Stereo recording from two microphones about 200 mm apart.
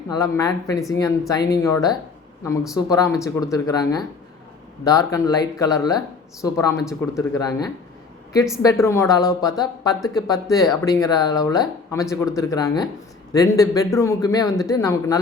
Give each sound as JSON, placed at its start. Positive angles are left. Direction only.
{"t": 0.1, "sound": "speech", "side_deg": 15}